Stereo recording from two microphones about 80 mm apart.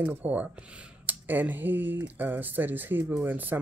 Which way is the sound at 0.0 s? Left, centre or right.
Right.